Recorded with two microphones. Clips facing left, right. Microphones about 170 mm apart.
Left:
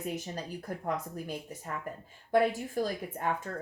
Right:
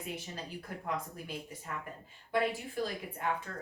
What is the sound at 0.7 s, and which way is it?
Speech, 45° left (ahead or behind).